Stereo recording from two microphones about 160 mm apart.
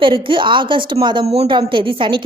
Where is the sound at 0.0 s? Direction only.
30° right (ahead or behind).